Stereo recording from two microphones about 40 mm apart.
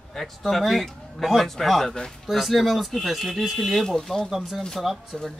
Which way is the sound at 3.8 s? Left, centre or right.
Centre.